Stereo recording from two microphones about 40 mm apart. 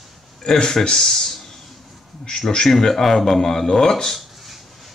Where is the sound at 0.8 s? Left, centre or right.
Centre.